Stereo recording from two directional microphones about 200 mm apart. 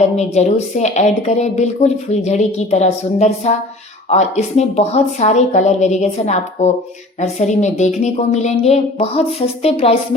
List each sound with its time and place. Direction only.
0.2 s a woman's voice: 35° left (ahead or behind)